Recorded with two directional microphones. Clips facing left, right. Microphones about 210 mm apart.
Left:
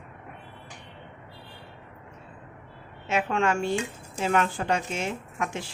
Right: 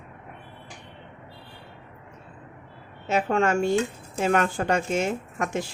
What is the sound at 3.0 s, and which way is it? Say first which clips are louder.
A woman's voice: right 3 dB; 40° right (ahead or behind).